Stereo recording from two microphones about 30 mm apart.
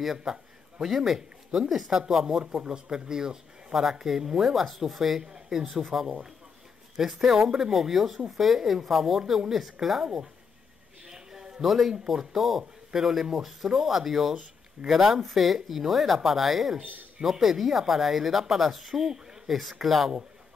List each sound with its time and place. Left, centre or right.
0.2 s a sound: right
0.8 s speech: centre
2.5 s speech: right; by 5.2 s centre
5.2 s speech: right
5.6 s speech: centre
10.0 s speech: right
11.1 s a sound: centre
11.6 s speech: centre
19.0 s a sound: centre
19.5 s speech: centre